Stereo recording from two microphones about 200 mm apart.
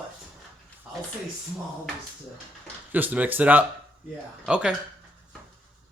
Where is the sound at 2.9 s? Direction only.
10° right (ahead or behind).